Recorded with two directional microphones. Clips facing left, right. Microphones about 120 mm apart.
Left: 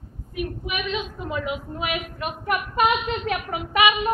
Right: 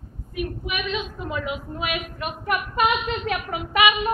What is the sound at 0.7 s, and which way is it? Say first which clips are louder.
A woman's voice: even; 25° left (ahead or behind).